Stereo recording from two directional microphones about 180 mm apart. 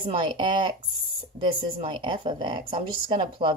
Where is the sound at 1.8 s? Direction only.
25° right (ahead or behind).